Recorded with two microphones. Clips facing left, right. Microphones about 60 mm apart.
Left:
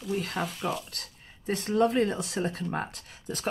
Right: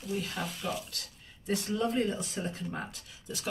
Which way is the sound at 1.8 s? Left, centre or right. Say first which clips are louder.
Left 8 dB; left.